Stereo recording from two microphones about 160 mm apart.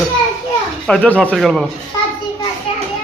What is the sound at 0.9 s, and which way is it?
Speech, 5° left (ahead or behind).